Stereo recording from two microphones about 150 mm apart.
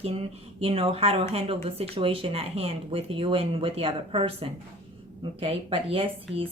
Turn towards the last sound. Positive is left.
turn(degrees=-40)  # may be behind; listen again after turning